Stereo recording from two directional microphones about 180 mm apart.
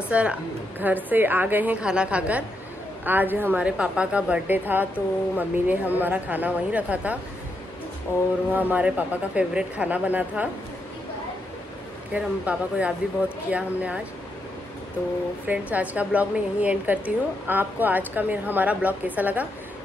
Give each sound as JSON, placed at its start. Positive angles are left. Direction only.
{"t": 0.1, "sound": "a woman's voice", "side_deg": -5}
{"t": 8.5, "sound": "a woman's voice", "side_deg": -10}
{"t": 12.1, "sound": "a woman's voice", "side_deg": -5}
{"t": 15.4, "sound": "a woman's voice", "side_deg": -10}